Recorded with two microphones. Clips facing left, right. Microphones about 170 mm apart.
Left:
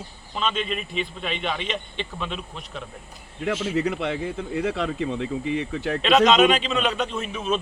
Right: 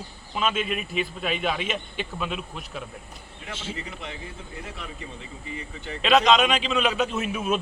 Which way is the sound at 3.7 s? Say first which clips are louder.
Left 12 dB; 70° left (ahead or behind).